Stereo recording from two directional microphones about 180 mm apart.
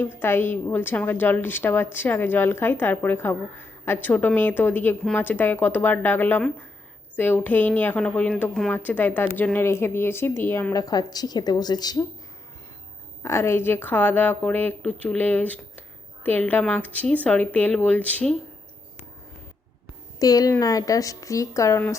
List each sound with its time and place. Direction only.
0.0 s a woman's voice: 10° left (ahead or behind)
13.2 s a woman's voice: 15° left (ahead or behind)
20.1 s a woman's voice: 20° left (ahead or behind)